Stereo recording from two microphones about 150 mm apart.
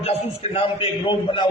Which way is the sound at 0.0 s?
40° left (ahead or behind).